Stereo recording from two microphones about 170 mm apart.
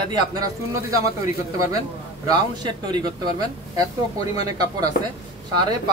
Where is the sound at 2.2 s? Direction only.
25° right (ahead or behind).